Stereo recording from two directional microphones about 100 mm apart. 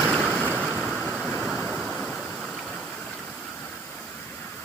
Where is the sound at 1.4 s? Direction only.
5° right (ahead or behind).